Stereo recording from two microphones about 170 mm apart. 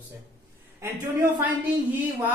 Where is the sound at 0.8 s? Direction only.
15° right (ahead or behind).